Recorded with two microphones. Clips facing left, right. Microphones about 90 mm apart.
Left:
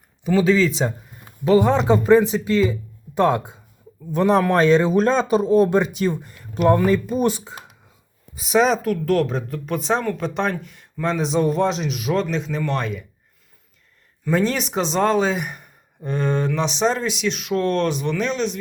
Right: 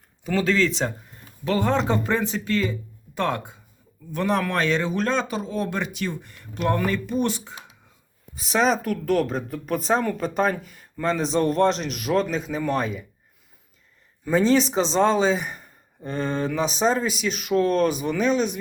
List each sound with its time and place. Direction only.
0.3 s speech: 10° left (ahead or behind)
1.5 s speech: 15° left (ahead or behind)
8.4 s speech: 5° left (ahead or behind)
14.3 s speech: centre (ahead or behind)